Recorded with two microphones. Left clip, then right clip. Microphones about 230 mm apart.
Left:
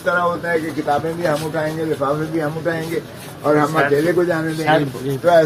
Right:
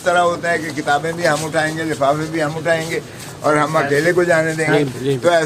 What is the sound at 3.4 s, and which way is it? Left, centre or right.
Speech, centre.